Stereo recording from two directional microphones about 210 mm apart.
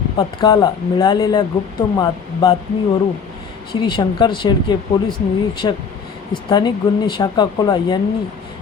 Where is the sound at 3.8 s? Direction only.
20° left (ahead or behind).